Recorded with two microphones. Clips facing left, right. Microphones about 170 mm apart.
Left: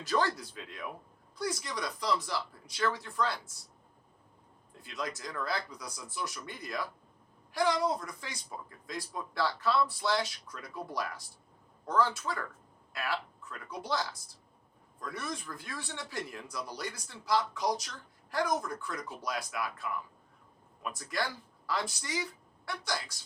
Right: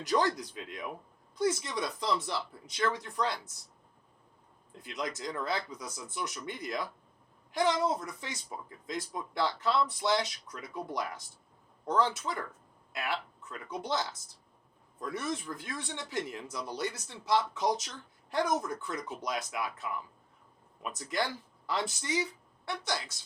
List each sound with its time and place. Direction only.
0.0 s speech: 15° right (ahead or behind)
4.8 s speech: 20° right (ahead or behind)